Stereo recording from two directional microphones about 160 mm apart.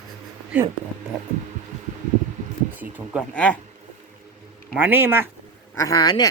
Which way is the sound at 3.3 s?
10° left (ahead or behind).